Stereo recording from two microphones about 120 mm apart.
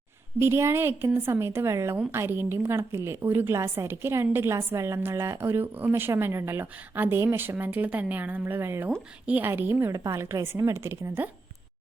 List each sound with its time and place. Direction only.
0.3 s a woman's voice: 20° right (ahead or behind)